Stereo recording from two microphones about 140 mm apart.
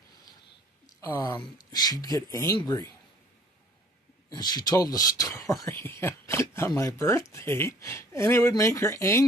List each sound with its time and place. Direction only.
1.4 s speech: 30° left (ahead or behind)
4.3 s speech: 30° left (ahead or behind)